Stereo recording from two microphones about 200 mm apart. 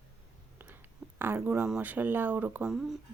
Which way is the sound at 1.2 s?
10° right (ahead or behind).